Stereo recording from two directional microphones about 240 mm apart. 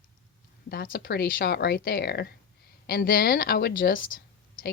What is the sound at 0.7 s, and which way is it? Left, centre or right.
A woman's voice, left.